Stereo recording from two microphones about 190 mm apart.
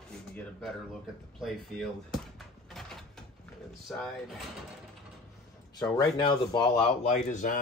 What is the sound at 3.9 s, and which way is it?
Speech, centre (ahead or behind).